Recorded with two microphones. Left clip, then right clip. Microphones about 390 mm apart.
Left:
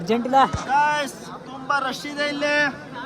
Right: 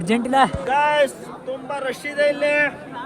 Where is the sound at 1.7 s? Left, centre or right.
Centre.